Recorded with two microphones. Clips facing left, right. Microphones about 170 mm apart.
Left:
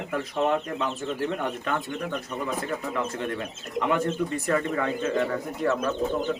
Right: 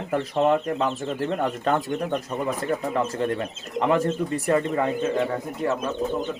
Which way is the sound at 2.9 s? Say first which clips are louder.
Right 5 dB; 35° right (ahead or behind).